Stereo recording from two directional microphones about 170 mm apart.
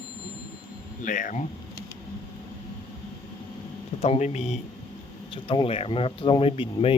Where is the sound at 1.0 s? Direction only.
50° left (ahead or behind).